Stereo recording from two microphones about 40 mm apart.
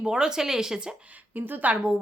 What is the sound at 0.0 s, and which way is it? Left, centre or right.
Speech, centre.